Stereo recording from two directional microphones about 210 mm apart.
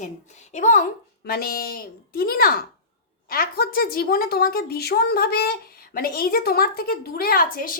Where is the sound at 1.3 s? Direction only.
45° left (ahead or behind).